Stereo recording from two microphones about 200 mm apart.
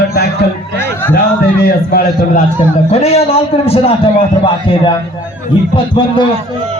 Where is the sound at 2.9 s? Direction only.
30° left (ahead or behind).